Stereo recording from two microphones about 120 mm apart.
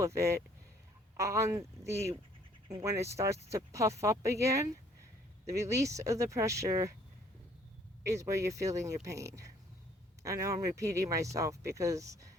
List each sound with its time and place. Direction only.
0.0 s speech: 25° right (ahead or behind)
8.0 s speech: 25° right (ahead or behind)